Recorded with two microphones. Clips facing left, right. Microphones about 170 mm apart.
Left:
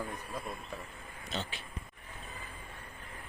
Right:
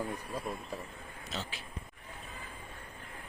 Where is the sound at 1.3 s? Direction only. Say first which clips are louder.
Left 2 dB; centre (ahead or behind).